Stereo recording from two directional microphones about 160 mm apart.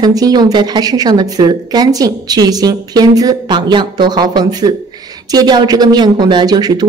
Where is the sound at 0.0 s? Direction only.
25° right (ahead or behind).